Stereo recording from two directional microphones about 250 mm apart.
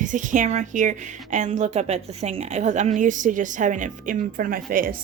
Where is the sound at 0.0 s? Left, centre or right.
Right.